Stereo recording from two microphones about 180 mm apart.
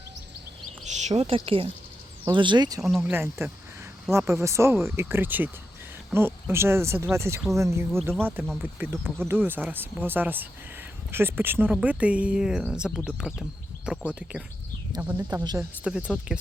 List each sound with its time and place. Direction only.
0.9 s a sound: 40° right (ahead or behind)
1.5 s speech: 30° right (ahead or behind)
2.8 s speech: centre (ahead or behind)
3.1 s speech: 15° right (ahead or behind)
15.3 s speech: 20° right (ahead or behind)
15.8 s speech: 5° right (ahead or behind)